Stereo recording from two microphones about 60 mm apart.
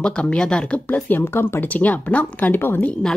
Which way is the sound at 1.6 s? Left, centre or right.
Left.